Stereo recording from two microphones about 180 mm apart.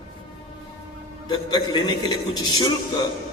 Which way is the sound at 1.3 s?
25° left (ahead or behind).